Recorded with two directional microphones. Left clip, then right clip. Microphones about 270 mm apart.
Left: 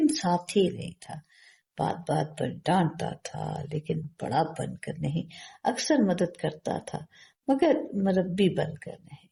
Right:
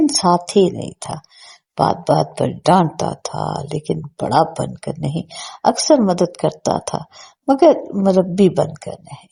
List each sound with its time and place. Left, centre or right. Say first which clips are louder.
0.3 s speech: right 12 dB; right